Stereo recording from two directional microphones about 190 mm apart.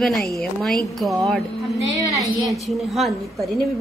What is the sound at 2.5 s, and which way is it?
A woman's voice, centre (ahead or behind).